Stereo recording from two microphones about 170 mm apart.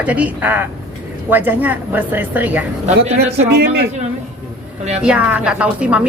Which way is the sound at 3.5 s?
75° right (ahead or behind).